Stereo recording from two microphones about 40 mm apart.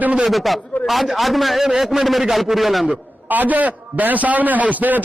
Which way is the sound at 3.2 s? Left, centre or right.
Right.